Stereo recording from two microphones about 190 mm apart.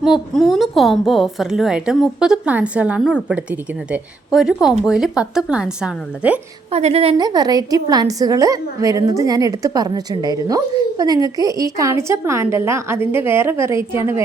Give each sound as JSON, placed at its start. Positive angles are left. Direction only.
{"t": 0.0, "sound": "a woman's voice", "side_deg": 0}
{"t": 6.7, "sound": "a woman's voice", "side_deg": -35}